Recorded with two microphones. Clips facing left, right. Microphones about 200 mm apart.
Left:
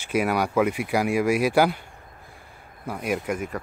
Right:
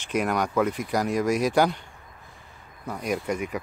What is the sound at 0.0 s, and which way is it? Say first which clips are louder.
Speech: left 2 dB; 5° left (ahead or behind).